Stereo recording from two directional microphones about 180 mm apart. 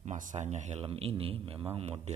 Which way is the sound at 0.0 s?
40° right (ahead or behind).